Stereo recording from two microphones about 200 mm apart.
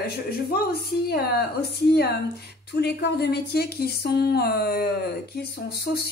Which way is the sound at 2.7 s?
55° left (ahead or behind).